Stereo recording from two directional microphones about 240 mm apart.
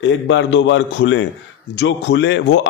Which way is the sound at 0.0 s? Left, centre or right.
Left.